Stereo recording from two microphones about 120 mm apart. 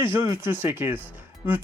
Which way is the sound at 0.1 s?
20° right (ahead or behind).